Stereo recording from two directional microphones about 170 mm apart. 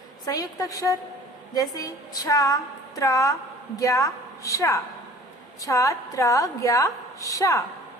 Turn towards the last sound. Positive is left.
turn(degrees=20)  # may be behind; listen again after turning